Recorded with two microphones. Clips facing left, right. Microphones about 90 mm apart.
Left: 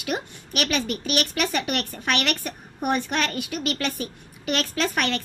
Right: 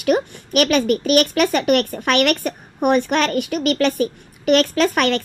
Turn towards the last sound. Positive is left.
turn(degrees=-60)  # may be behind; listen again after turning